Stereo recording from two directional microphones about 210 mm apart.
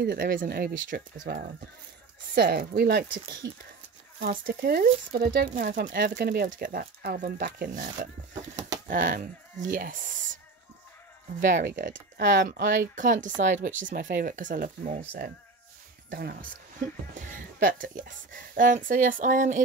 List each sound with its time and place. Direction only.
0.0 s speech: 45° right (ahead or behind)
4.6 s speech: 45° right (ahead or behind)